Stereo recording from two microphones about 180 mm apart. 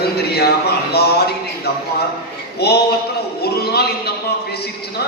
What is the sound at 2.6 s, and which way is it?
A man's voice, 65° left (ahead or behind).